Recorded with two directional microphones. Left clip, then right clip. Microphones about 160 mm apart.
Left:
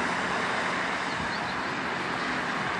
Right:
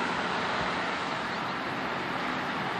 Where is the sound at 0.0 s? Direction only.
35° left (ahead or behind).